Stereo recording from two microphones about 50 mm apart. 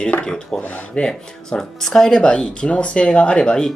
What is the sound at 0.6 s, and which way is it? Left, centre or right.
Speech, left.